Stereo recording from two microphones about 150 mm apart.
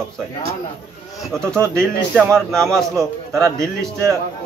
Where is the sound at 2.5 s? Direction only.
Centre (ahead or behind).